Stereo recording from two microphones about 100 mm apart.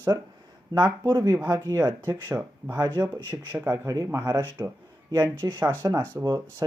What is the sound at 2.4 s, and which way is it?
Speech, 15° right (ahead or behind).